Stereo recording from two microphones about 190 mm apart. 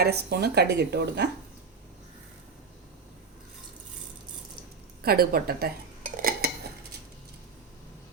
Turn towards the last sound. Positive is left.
turn(degrees=-50)  # may be behind; listen again after turning